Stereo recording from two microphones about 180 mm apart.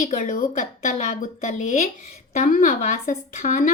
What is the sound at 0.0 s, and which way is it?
A woman's voice, 45° left (ahead or behind).